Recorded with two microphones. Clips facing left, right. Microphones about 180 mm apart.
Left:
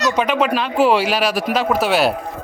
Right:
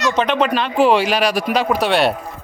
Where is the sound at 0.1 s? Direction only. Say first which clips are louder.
Right 2 dB; 10° left (ahead or behind).